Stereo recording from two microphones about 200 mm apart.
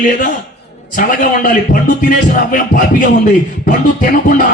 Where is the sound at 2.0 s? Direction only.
45° left (ahead or behind).